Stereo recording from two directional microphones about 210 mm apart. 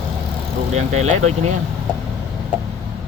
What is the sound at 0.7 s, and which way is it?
Speech, 30° right (ahead or behind).